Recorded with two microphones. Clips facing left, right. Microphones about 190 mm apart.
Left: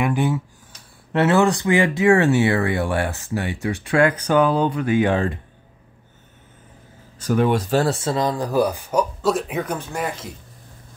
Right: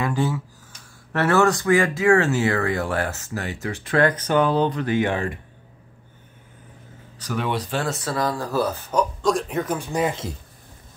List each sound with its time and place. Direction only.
0.0 s speech: 15° left (ahead or behind)
2.0 s speech: 30° left (ahead or behind)
3.5 s speech: 10° left (ahead or behind)
5.1 s speech: 30° left (ahead or behind)
7.2 s speech: 45° left (ahead or behind)
8.0 s speech: 20° left (ahead or behind); by 9.8 s centre (ahead or behind)
9.8 s speech: 15° right (ahead or behind)